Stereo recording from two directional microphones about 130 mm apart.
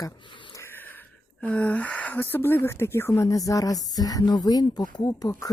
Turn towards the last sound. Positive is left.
turn(degrees=30)  # may be behind; listen again after turning